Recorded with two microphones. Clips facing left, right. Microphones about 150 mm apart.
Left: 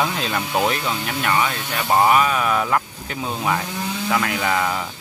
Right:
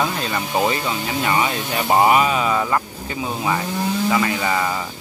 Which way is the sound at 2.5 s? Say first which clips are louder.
Even; centre (ahead or behind).